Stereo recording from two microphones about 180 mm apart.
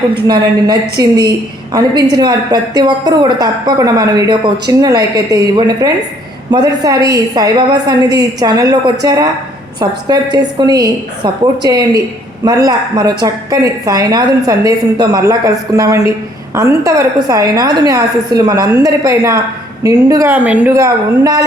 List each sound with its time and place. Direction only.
0.3 s a woman's voice: 20° right (ahead or behind)